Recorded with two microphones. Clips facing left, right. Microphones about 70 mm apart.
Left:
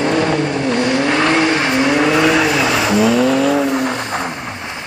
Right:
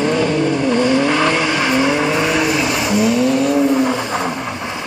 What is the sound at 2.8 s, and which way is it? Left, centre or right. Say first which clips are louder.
Vehicle: left 2 dB; left.